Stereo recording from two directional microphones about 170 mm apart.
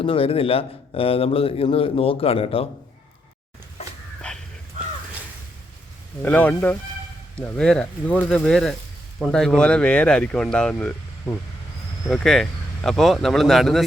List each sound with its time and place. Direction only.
0.0 s a man's voice: 35° left (ahead or behind)
6.2 s speech: 10° left (ahead or behind)
12.0 s speech: 5° left (ahead or behind)